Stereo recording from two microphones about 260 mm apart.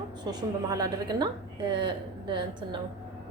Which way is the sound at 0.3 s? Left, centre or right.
Centre.